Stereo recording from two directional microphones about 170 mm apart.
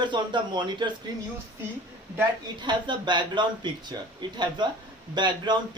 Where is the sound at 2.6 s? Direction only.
25° right (ahead or behind).